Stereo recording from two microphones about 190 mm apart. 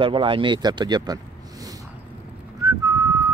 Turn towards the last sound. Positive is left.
turn(degrees=-15)  # may be behind; listen again after turning